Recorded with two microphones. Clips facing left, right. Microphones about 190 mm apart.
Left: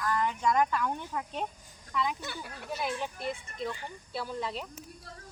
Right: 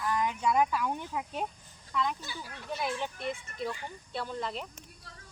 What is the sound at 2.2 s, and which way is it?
Speech, 60° left (ahead or behind).